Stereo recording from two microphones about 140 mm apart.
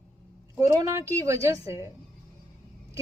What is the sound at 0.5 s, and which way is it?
A woman's voice, 25° right (ahead or behind).